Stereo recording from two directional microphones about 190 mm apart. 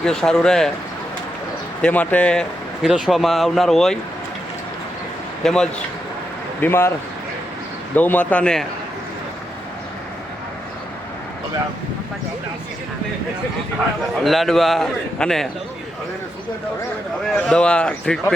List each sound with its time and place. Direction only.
0.0 s a man's voice: 5° left (ahead or behind)
1.8 s a man's voice: 10° left (ahead or behind)
5.4 s a man's voice: 5° left (ahead or behind)
7.9 s a man's voice: 10° left (ahead or behind)
14.3 s a man's voice: centre (ahead or behind)
17.2 s a man's voice: centre (ahead or behind)